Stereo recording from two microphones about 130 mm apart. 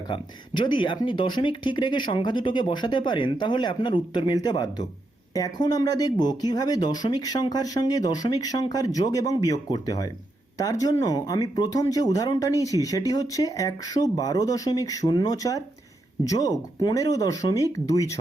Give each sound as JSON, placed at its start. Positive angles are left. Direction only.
{"t": 0.1, "sound": "speech", "side_deg": 40}